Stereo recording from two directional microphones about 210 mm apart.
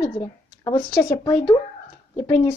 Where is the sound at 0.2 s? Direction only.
20° left (ahead or behind).